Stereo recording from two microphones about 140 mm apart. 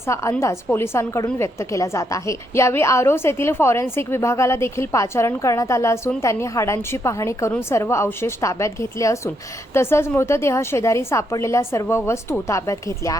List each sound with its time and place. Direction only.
0.1 s a woman's voice: 20° left (ahead or behind)